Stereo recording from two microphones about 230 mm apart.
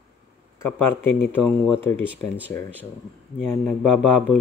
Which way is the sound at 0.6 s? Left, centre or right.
Centre.